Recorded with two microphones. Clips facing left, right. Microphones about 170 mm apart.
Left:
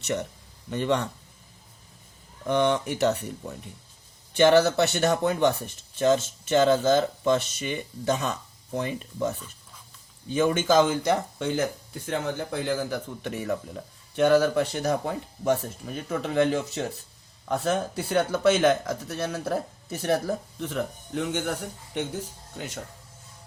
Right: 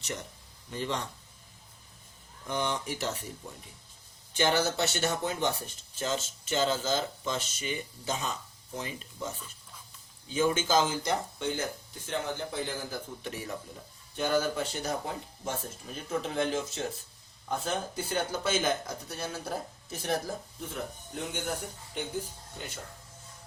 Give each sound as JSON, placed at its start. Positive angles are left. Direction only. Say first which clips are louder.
{"t": 0.0, "sound": "speech", "louder": "left 10 dB", "side_deg": 65}
{"t": 2.5, "sound": "speech", "louder": "left 9 dB", "side_deg": 65}
{"t": 4.4, "sound": "speech", "louder": "left 9 dB", "side_deg": 65}
{"t": 12.1, "sound": "speech", "louder": "left 4 dB", "side_deg": 80}
{"t": 20.6, "sound": "speech", "louder": "left 8 dB", "side_deg": 75}
{"t": 22.5, "sound": "speech", "louder": "left 6 dB", "side_deg": 80}